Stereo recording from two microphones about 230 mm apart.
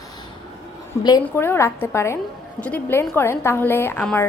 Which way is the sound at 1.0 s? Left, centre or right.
Centre.